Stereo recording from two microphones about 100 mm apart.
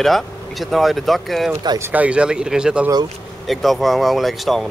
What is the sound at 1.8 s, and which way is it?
Speech, 15° right (ahead or behind).